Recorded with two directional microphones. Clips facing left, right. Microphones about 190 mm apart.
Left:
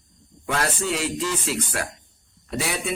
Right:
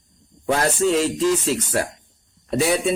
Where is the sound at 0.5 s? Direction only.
35° right (ahead or behind).